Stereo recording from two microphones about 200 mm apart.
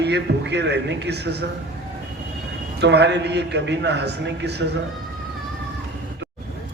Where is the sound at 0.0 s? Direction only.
60° right (ahead or behind).